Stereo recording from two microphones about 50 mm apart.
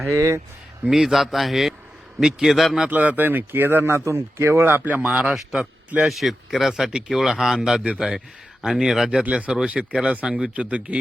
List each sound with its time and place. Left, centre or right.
0.1 s speech: right
0.9 s a man's voice: centre
2.9 s speech: right
4.6 s speech: right
5.0 s speech: right
6.1 s speech: centre; by 11.0 s right